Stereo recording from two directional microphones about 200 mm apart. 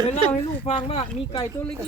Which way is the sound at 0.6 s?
30° left (ahead or behind).